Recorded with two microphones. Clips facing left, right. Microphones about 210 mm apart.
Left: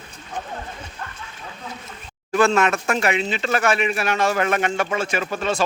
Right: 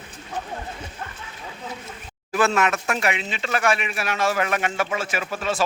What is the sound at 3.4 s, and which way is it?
Speech, 35° left (ahead or behind).